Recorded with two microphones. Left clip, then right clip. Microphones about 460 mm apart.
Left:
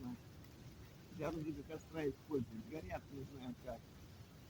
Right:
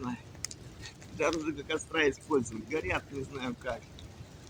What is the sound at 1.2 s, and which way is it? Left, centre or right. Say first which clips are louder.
Speech: right 13 dB; left.